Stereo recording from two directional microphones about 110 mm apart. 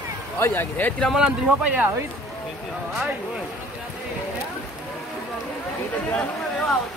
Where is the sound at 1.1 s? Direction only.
10° right (ahead or behind).